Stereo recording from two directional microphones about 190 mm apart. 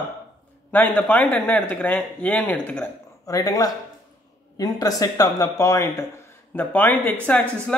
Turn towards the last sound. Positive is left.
turn(degrees=10)  # may be behind; listen again after turning